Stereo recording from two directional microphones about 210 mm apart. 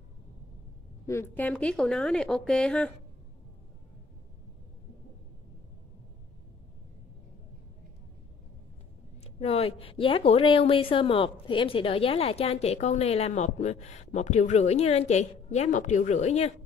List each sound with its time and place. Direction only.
1.0 s speech: 10° left (ahead or behind)
9.2 s a woman's voice: 30° left (ahead or behind)